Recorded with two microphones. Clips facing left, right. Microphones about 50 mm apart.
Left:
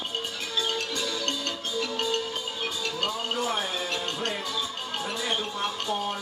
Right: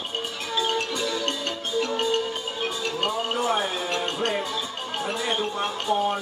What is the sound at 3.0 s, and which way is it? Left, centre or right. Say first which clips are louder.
Speech: right 4 dB; right.